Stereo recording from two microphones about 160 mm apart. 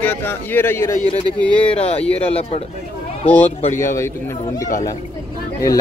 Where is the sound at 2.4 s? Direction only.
35° left (ahead or behind).